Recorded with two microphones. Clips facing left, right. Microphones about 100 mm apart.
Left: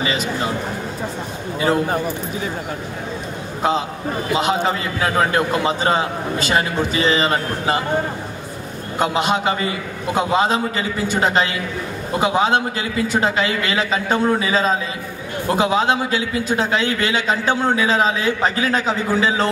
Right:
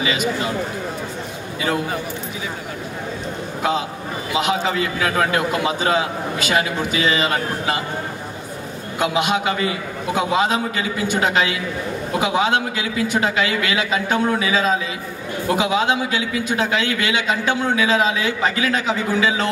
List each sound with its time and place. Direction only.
1.6 s a man's voice: 40° left (ahead or behind)
4.3 s a man's voice: 40° left (ahead or behind)
8.9 s a man's voice: 40° left (ahead or behind)